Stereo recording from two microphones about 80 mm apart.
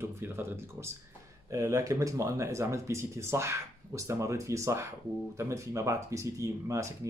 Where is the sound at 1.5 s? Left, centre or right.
Right.